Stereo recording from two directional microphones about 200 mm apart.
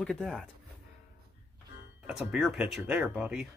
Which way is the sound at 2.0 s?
5° right (ahead or behind).